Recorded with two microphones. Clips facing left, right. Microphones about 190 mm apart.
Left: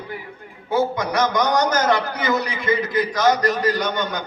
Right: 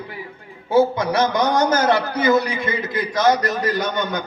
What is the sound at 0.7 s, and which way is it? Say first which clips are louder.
A man's voice: right 4 dB; 25° right (ahead or behind).